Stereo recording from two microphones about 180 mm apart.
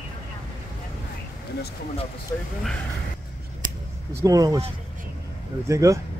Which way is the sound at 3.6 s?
50° right (ahead or behind).